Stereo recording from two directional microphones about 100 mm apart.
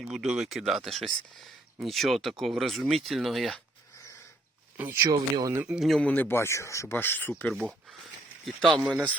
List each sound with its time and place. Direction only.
0.0 s speech: 5° right (ahead or behind)
4.8 s speech: 20° right (ahead or behind)
5.5 s a man's voice: 10° right (ahead or behind)
6.0 s speech: 15° left (ahead or behind)
8.4 s speech: centre (ahead or behind)
8.9 s a man's voice: 10° right (ahead or behind)